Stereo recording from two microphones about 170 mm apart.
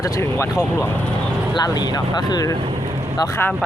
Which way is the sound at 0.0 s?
15° left (ahead or behind).